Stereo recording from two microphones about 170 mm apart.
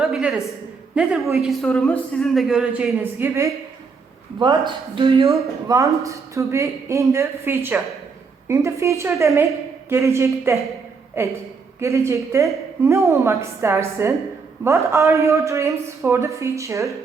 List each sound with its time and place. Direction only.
0.0 s a sound: 5° right (ahead or behind)
0.9 s a man's voice: 5° right (ahead or behind)
4.4 s speech: 25° right (ahead or behind)
5.3 s speech: 20° right (ahead or behind)